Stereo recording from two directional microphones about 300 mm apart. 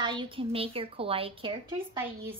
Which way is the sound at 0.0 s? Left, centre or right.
Centre.